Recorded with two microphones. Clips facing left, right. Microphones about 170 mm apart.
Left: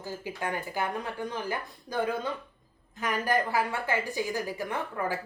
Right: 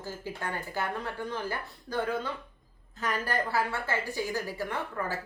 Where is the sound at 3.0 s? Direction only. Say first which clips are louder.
Left 3 dB; 15° left (ahead or behind).